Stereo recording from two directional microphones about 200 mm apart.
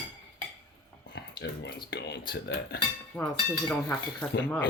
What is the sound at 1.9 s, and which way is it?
Speech, 55° left (ahead or behind).